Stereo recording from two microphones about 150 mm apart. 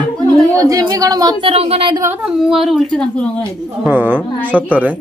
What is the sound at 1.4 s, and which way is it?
Speech, 40° right (ahead or behind).